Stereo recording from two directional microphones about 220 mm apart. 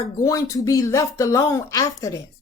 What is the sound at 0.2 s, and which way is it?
Speech, 15° left (ahead or behind).